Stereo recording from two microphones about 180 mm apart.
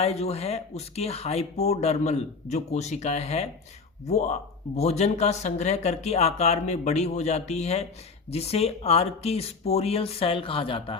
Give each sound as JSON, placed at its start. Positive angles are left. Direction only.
{"t": 0.0, "sound": "speech", "side_deg": 35}